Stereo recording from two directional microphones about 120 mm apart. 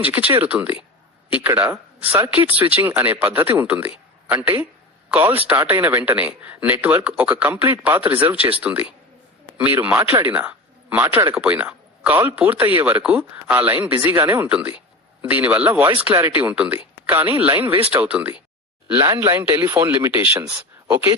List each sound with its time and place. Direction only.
0.0 s speech: 15° right (ahead or behind)
19.0 s speech: 25° right (ahead or behind)